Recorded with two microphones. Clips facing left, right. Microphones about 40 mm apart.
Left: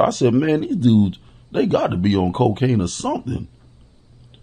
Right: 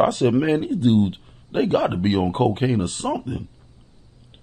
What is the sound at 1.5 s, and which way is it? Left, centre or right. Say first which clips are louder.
Speech: left 2 dB; centre.